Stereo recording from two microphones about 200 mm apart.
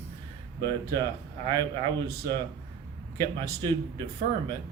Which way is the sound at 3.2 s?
20° right (ahead or behind).